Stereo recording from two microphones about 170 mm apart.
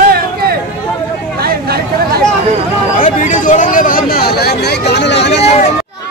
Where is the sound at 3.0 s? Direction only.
50° left (ahead or behind); by 5.4 s 90° left.